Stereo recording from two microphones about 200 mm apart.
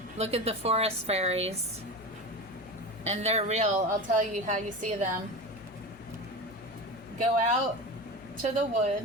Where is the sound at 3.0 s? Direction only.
30° right (ahead or behind).